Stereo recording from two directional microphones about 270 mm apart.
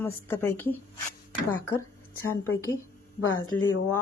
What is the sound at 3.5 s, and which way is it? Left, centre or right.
Speech, centre.